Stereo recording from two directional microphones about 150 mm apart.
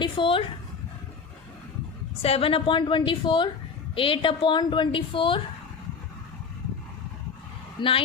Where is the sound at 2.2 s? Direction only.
40° left (ahead or behind).